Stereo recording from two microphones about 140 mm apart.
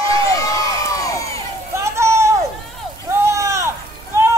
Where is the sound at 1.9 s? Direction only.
20° right (ahead or behind).